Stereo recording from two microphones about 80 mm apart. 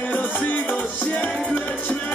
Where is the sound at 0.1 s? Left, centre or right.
Left.